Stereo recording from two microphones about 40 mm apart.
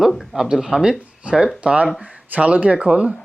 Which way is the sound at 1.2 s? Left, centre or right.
Right.